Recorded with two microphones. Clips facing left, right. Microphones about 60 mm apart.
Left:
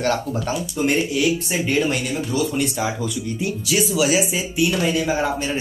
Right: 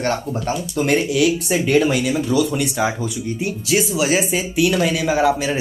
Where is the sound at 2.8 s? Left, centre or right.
Right.